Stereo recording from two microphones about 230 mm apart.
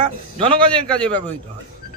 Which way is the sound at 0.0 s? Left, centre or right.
Right.